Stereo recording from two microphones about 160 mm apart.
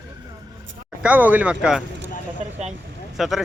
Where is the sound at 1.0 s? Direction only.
10° right (ahead or behind).